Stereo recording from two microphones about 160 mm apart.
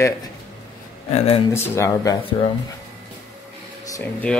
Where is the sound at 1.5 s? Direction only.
15° left (ahead or behind).